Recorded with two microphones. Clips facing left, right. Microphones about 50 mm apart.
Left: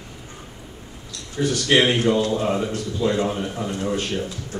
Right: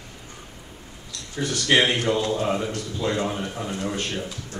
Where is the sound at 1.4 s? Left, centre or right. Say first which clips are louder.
Left 2 dB; centre.